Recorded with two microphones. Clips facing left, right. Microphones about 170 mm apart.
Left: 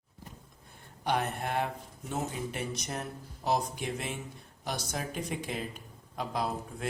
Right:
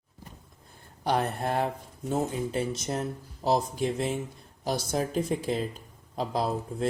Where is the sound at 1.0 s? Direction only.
35° right (ahead or behind).